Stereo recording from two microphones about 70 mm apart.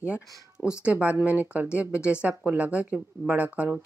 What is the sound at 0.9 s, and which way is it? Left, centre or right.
Speech, right.